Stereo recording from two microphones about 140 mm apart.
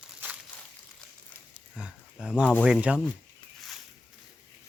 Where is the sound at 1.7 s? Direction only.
5° right (ahead or behind).